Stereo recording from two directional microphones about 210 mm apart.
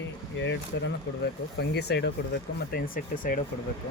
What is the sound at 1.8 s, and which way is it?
Speech, 55° left (ahead or behind).